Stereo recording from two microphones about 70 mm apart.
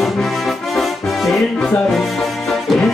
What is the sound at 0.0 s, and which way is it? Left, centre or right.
Music, centre.